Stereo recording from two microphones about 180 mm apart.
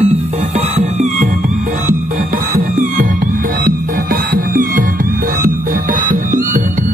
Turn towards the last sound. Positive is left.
turn(degrees=-45)  # may be behind; listen again after turning